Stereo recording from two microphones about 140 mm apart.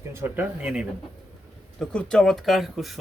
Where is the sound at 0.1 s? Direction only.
15° right (ahead or behind).